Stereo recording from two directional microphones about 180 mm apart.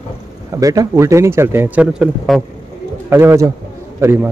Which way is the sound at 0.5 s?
20° right (ahead or behind).